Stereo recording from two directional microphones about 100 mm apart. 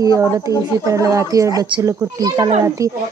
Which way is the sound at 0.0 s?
35° right (ahead or behind).